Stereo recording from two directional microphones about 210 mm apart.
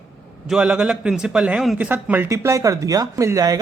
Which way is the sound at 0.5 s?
5° right (ahead or behind).